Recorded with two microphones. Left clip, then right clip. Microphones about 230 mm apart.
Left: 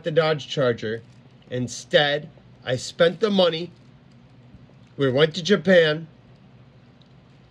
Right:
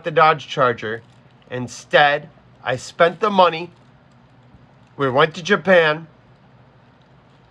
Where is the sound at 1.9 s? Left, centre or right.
Centre.